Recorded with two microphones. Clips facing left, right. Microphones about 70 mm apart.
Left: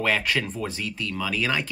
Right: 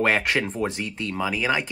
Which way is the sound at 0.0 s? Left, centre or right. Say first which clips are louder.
Right 3 dB; right.